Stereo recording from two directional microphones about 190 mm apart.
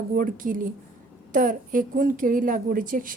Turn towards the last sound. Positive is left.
turn(degrees=-45)  # may be behind; listen again after turning